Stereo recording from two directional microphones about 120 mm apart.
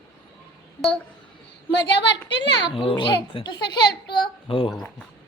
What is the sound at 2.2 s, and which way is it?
A child's voice, 45° left (ahead or behind).